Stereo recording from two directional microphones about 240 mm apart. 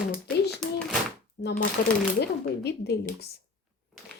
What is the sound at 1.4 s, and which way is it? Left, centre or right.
Speech, left.